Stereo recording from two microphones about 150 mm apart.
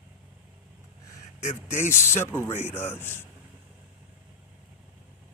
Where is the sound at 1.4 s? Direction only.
45° left (ahead or behind).